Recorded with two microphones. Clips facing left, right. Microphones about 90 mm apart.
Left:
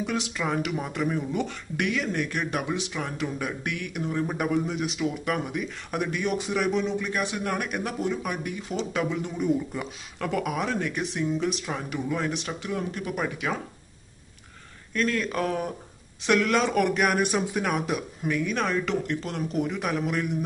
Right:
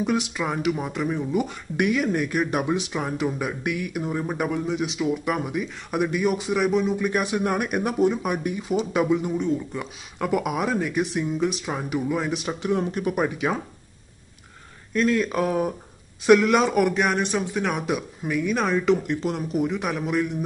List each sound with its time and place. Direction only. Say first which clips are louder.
0.0 s speech: right 4 dB; 15° right (ahead or behind)
7.0 s speech: right 5 dB; 15° right (ahead or behind)
9.7 s speech: right 1 dB; 5° left (ahead or behind)
10.1 s speech: right 4 dB; 15° right (ahead or behind)
12.4 s speech: right 6 dB; 20° right (ahead or behind)
14.9 s speech: right 5 dB; 15° right (ahead or behind)
16.9 s speech: right 1 dB; 5° left (ahead or behind)
17.6 s speech: right 2 dB; centre (ahead or behind)